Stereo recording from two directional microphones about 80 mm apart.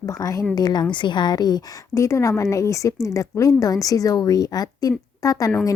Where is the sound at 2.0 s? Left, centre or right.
Left.